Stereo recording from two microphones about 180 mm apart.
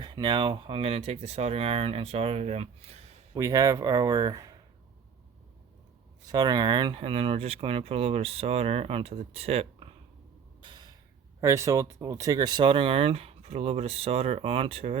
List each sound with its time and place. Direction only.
0.0 s speech: 25° right (ahead or behind)
3.3 s speech: 20° right (ahead or behind)
6.2 s speech: 20° right (ahead or behind)
10.6 s a sound: 25° right (ahead or behind)
11.3 s speech: 15° right (ahead or behind); by 14.9 s 35° right (ahead or behind)